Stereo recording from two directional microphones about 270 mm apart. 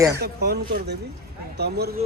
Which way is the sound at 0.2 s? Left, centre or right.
Right.